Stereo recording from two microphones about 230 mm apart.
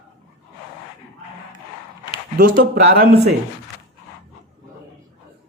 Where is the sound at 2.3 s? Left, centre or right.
Right.